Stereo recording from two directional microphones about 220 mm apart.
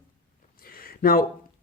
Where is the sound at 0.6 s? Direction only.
40° left (ahead or behind).